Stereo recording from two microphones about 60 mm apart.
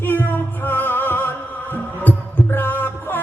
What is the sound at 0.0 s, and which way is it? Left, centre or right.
Music, left.